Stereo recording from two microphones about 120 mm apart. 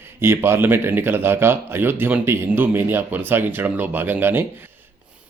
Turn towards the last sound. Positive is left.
turn(degrees=-15)  # may be behind; listen again after turning